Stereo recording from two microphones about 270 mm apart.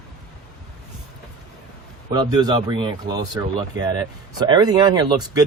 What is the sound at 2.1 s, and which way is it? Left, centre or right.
Speech, centre.